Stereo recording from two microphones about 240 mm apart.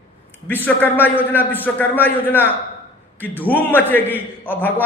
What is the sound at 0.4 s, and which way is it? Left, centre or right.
A man's voice, centre.